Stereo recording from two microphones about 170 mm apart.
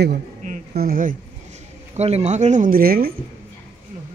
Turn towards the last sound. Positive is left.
turn(degrees=-60)  # may be behind; listen again after turning